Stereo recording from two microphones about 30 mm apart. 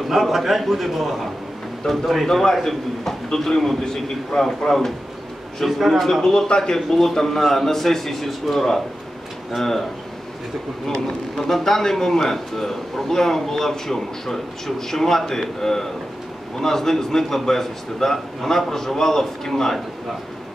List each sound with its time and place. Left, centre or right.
0.1 s a man's voice: centre
1.8 s a man's voice: centre
5.7 s a man's voice: centre
6.2 s a man's voice: centre
6.9 s a man's voice: centre
11.3 s a man's voice: centre